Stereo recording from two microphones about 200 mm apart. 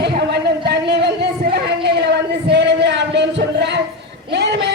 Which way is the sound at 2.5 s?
60° right (ahead or behind).